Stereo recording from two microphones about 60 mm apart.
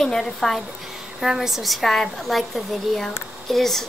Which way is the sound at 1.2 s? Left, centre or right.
Centre.